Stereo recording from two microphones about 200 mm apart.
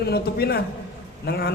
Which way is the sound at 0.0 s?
50° left (ahead or behind).